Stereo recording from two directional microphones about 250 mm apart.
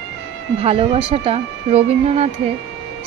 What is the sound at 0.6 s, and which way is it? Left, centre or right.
Speech, right.